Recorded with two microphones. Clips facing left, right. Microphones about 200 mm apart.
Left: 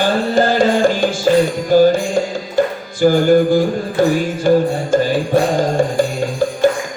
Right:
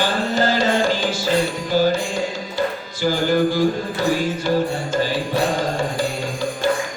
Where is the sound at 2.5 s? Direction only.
50° left (ahead or behind).